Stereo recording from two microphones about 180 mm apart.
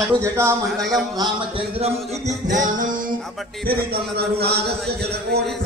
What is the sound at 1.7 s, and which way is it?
Music, 35° right (ahead or behind).